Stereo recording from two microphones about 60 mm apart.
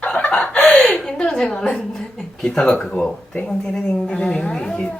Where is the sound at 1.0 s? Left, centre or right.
Centre.